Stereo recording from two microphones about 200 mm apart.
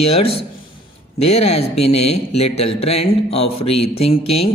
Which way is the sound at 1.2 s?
30° left (ahead or behind).